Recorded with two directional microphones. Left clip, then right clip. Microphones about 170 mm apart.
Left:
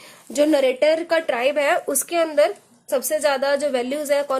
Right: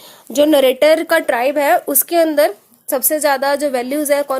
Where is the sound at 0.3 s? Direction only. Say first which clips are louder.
Right 6 dB; 45° right (ahead or behind).